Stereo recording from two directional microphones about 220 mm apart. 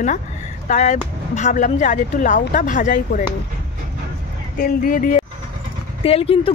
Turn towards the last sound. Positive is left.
turn(degrees=25)  # may be behind; listen again after turning